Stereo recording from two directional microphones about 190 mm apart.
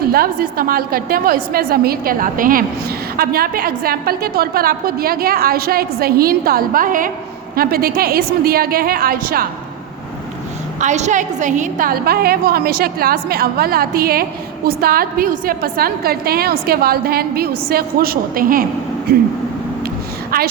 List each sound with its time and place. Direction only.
0.1 s a woman's voice: 50° right (ahead or behind)
10.8 s a woman's voice: 40° right (ahead or behind)
20.3 s a woman's voice: 55° right (ahead or behind)